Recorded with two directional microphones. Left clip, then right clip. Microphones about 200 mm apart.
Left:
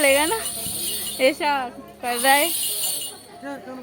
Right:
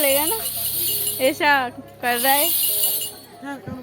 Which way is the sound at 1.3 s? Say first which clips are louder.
Right 5 dB; 15° right (ahead or behind).